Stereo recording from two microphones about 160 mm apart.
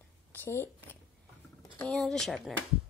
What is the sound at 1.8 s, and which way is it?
Speech, 5° left (ahead or behind).